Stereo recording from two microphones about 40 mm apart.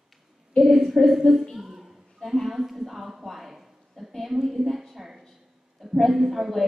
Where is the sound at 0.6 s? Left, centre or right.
Centre.